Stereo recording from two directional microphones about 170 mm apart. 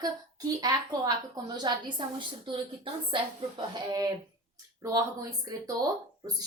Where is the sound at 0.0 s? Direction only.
20° right (ahead or behind).